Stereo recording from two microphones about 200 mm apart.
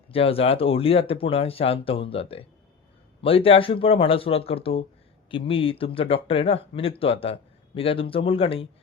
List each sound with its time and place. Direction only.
0.1 s speech: 30° left (ahead or behind)